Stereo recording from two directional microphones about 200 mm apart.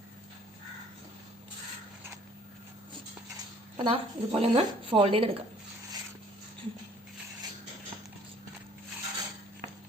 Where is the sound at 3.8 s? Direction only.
25° right (ahead or behind).